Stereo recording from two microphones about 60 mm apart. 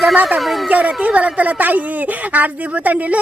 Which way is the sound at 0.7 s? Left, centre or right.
Right.